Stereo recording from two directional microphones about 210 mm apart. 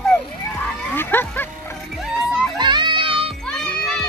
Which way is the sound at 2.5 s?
20° right (ahead or behind).